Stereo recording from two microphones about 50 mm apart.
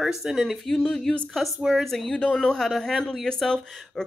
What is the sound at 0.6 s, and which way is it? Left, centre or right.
Speech, centre.